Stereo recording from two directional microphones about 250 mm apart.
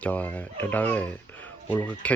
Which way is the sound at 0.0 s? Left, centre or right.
Centre.